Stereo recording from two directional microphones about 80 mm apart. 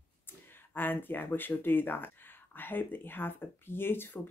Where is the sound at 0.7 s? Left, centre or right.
Left.